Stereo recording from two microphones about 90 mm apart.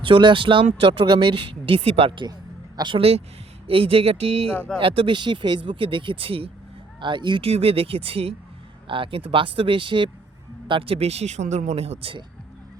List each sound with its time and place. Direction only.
0.0 s speech: 65° right (ahead or behind); by 2.2 s 85° right
2.7 s speech: 65° right (ahead or behind); by 3.2 s 80° right
3.7 s speech: 90° right
7.0 s speech: 60° right (ahead or behind); by 8.4 s 90° right
8.9 s speech: 75° right (ahead or behind)
10.7 s speech: 85° right